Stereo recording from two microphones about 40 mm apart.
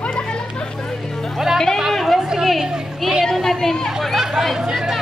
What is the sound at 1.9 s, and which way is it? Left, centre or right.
Chatter, centre.